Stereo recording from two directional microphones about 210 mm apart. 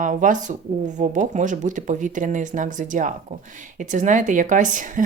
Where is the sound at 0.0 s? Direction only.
40° right (ahead or behind).